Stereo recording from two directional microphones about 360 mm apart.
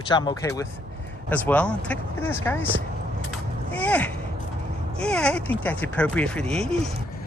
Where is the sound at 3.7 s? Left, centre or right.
Centre.